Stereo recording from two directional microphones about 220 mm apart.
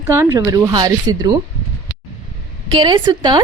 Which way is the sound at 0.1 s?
15° right (ahead or behind).